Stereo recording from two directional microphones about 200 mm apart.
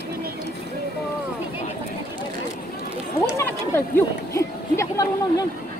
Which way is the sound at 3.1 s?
15° left (ahead or behind).